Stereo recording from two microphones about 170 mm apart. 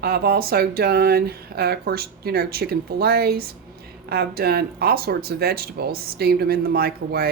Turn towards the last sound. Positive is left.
turn(degrees=-65)  # may be behind; listen again after turning